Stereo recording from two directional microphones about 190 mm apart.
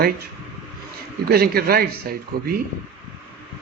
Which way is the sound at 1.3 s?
55° right (ahead or behind).